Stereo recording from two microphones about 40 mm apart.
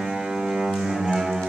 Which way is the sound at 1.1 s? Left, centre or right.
Centre.